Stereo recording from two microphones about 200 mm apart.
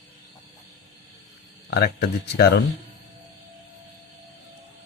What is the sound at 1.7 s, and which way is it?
Speech, 55° left (ahead or behind).